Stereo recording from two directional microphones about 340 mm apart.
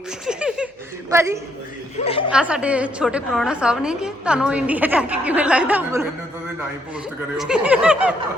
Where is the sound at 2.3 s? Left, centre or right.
Centre.